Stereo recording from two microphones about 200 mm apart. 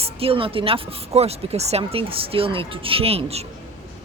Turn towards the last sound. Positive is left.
turn(degrees=-30)  # may be behind; listen again after turning